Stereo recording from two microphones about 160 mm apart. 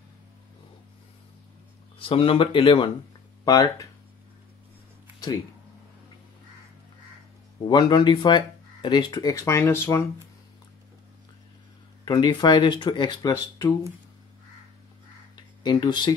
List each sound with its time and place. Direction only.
2.0 s speech: 35° left (ahead or behind)
7.6 s speech: 30° left (ahead or behind)
12.0 s speech: 25° left (ahead or behind)
15.3 s a sound: 25° left (ahead or behind)